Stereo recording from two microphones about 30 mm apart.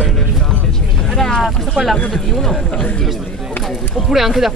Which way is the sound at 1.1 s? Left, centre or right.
Centre.